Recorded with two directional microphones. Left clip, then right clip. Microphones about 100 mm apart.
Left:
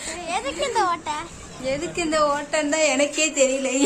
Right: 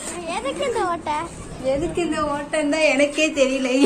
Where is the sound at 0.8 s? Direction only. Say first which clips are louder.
Even; 85° left.